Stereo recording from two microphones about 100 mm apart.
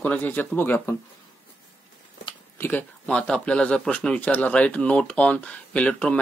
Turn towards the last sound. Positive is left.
turn(degrees=10)  # may be behind; listen again after turning